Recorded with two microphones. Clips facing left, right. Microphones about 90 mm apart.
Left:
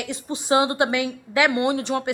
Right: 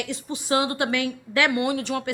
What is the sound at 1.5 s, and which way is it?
Speech, 25° left (ahead or behind).